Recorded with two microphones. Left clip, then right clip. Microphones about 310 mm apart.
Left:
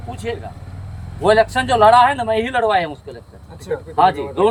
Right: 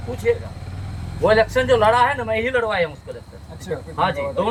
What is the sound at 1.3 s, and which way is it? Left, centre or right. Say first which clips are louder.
A man's voice: left 2 dB; centre.